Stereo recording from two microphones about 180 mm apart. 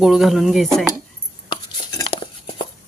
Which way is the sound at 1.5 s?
25° left (ahead or behind).